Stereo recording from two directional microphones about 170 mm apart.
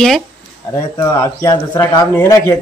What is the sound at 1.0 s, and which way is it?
Speech, 15° left (ahead or behind).